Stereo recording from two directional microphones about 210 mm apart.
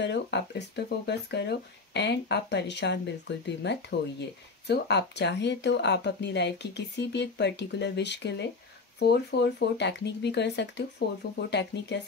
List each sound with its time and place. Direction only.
0.0 s speech: 55° left (ahead or behind)